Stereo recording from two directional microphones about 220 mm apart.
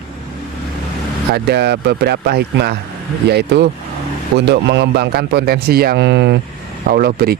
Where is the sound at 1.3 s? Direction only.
50° right (ahead or behind).